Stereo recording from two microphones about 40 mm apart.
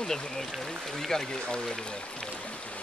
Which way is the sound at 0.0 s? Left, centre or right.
Centre.